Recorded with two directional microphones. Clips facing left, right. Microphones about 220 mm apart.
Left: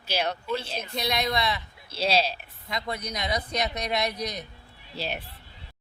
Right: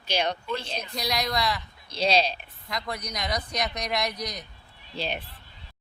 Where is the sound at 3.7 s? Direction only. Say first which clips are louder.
Left 1 dB; 25° left (ahead or behind).